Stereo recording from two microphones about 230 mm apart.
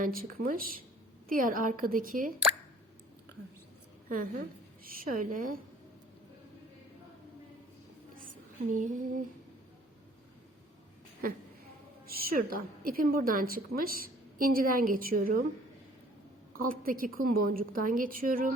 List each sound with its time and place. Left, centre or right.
0.0 s a woman's voice: right
4.8 s a woman's voice: right
8.7 s a woman's voice: right
12.0 s a woman's voice: right
16.6 s a woman's voice: right